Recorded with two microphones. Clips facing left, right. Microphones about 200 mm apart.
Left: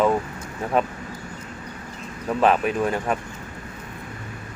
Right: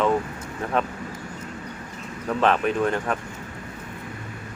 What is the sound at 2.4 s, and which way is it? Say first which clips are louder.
Speech: left 1 dB; 5° left (ahead or behind).